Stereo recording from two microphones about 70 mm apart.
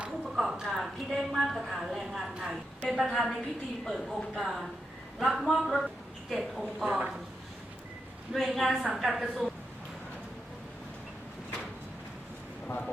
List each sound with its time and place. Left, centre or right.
0.0 s a woman's voice: centre
6.8 s a woman's voice: centre
8.3 s a woman's voice: centre
12.6 s a sound: left